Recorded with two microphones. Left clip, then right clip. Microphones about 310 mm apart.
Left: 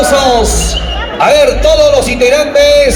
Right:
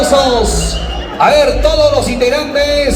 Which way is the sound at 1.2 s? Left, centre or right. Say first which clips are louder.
Left 2 dB; left.